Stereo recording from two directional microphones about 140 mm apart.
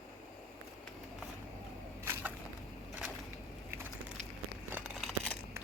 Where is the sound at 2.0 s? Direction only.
20° right (ahead or behind).